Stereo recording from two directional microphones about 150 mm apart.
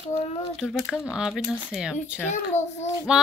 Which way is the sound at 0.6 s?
Centre (ahead or behind).